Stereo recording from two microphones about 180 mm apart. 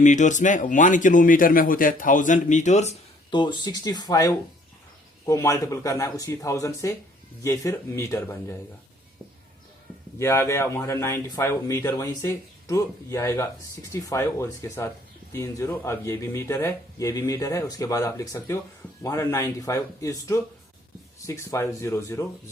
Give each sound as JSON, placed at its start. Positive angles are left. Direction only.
{"t": 0.0, "sound": "a man's voice", "side_deg": 45}
{"t": 3.3, "sound": "speech", "side_deg": 25}
{"t": 10.2, "sound": "speech", "side_deg": 15}